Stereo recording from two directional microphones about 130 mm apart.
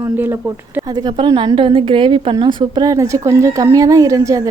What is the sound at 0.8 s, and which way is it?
A woman's voice, 30° right (ahead or behind).